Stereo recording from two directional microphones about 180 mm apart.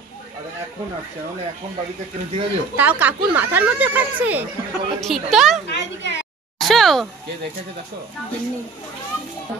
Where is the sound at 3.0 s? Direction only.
10° right (ahead or behind).